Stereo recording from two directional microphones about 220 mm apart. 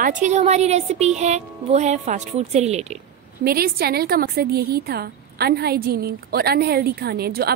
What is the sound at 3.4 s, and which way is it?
A woman's voice, 45° right (ahead or behind).